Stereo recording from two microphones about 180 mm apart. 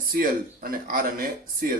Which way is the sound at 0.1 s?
50° right (ahead or behind).